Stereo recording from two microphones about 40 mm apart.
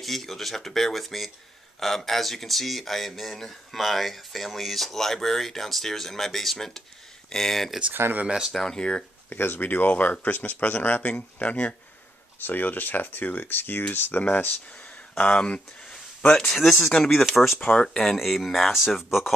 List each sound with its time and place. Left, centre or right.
0.0 s speech: centre
8.6 s speech: left
9.4 s speech: left
12.4 s speech: left
14.2 s speech: left
16.5 s speech: centre
18.1 s speech: centre